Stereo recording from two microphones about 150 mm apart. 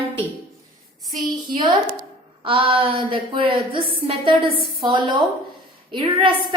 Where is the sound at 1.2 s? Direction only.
35° right (ahead or behind).